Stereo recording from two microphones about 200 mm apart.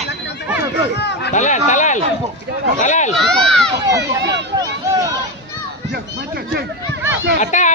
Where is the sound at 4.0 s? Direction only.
60° right (ahead or behind).